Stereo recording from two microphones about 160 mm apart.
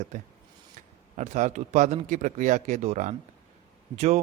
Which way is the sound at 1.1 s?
45° right (ahead or behind).